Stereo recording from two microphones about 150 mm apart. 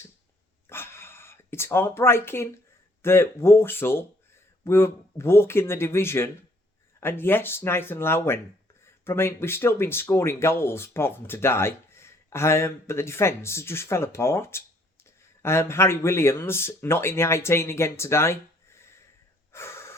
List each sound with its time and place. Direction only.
0.7 s a sound: 15° left (ahead or behind)
3.0 s speech: 15° left (ahead or behind)
19.5 s gasp: 15° left (ahead or behind)